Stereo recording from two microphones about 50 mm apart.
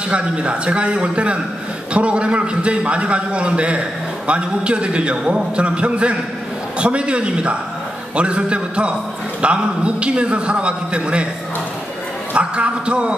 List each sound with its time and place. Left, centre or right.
0.1 s a man's voice: right
12.4 s a man's voice: right